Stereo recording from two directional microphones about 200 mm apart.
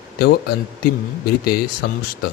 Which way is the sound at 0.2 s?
55° left (ahead or behind).